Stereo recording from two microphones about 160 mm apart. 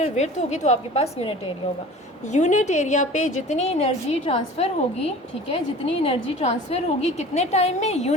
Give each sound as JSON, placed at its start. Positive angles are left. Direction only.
{"t": 0.0, "sound": "a woman's voice", "side_deg": 45}